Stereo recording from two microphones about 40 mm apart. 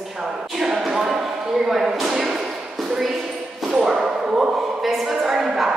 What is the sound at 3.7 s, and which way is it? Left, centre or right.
Whip, centre.